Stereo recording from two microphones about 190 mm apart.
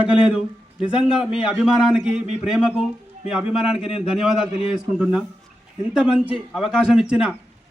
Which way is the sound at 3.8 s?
30° left (ahead or behind).